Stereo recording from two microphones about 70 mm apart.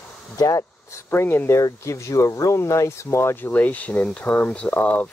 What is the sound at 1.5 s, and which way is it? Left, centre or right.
Speech, left.